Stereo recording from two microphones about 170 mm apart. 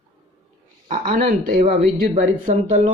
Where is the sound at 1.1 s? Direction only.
55° right (ahead or behind).